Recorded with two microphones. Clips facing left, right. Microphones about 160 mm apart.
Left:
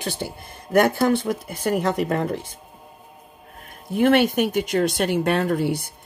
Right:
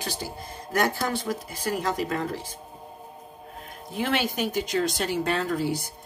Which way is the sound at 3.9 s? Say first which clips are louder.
Left 10 dB; 55° left (ahead or behind).